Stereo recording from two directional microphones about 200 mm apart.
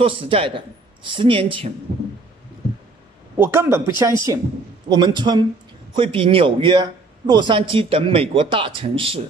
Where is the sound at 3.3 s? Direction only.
10° right (ahead or behind).